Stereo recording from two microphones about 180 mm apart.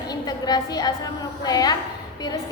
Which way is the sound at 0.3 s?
20° left (ahead or behind).